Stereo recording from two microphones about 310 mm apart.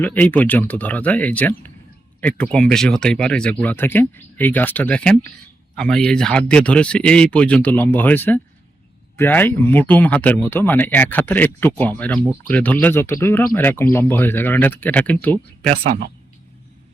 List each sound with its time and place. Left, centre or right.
0.0 s speech: centre
15.7 s speech: right